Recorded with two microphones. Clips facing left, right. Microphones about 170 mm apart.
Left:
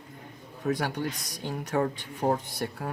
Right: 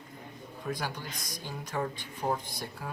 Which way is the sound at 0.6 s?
65° left (ahead or behind).